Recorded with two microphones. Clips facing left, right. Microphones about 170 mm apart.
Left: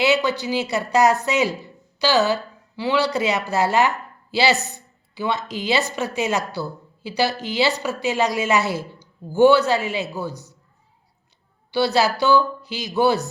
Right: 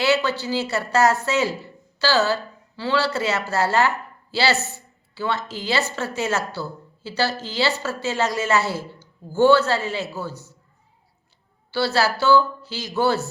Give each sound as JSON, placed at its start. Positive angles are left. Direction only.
{"t": 0.0, "sound": "a woman's voice", "side_deg": 15}
{"t": 11.7, "sound": "a woman's voice", "side_deg": 20}